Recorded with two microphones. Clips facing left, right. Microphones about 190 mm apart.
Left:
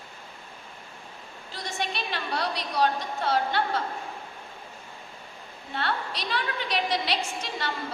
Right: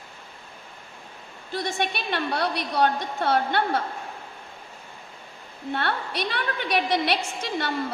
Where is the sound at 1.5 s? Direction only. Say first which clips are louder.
Right 5 dB; 60° right (ahead or behind).